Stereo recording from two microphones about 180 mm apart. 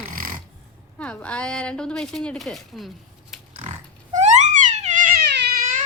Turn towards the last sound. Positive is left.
turn(degrees=-60)  # may be behind; listen again after turning